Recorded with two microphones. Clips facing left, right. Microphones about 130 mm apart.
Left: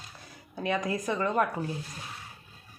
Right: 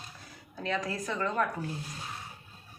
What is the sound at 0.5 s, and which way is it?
Speech, 15° left (ahead or behind).